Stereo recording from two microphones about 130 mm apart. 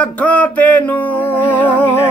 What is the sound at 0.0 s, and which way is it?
Music, 10° left (ahead or behind).